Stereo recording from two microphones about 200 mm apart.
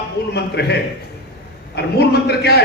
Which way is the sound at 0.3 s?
55° left (ahead or behind).